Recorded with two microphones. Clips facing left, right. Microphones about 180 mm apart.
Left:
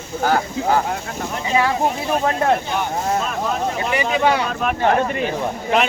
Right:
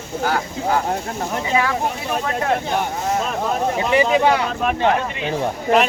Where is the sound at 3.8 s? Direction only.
25° right (ahead or behind).